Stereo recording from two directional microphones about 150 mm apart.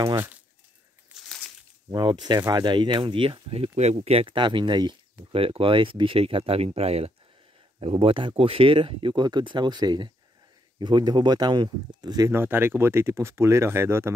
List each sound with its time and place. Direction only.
0.0 s speech: 15° right (ahead or behind)
1.9 s speech: 30° right (ahead or behind)